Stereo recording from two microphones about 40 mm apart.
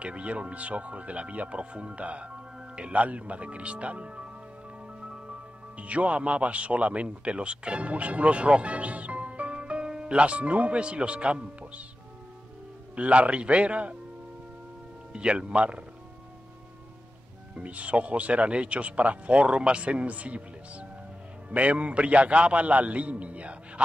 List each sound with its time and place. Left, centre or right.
0.0 s speech: right
5.8 s speech: right
12.9 s speech: right
15.1 s speech: right
17.6 s speech: right